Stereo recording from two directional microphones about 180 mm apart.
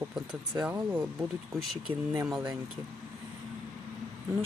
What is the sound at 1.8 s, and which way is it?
Speech, 20° right (ahead or behind).